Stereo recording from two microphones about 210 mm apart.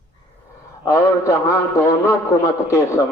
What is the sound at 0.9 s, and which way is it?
A man's voice, 15° left (ahead or behind).